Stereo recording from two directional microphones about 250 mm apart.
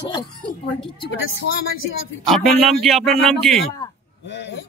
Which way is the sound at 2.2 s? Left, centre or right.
Centre.